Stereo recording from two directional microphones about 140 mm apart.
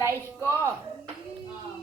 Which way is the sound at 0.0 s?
20° right (ahead or behind).